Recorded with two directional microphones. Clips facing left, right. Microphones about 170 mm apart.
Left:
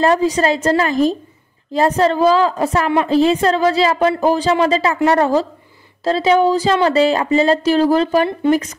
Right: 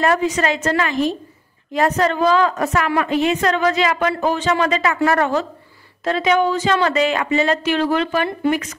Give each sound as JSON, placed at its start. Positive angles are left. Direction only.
{"t": 0.0, "sound": "a woman's voice", "side_deg": 30}
{"t": 6.0, "sound": "a woman's voice", "side_deg": 30}